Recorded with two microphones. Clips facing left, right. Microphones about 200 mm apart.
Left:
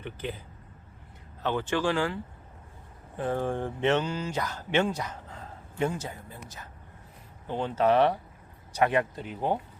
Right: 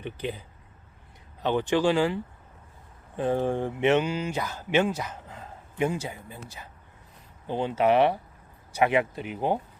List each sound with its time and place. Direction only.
0.0 s speech: 15° right (ahead or behind)
3.2 s speech: 20° right (ahead or behind)
5.3 s a sound: 15° right (ahead or behind)
7.4 s speech: 10° right (ahead or behind)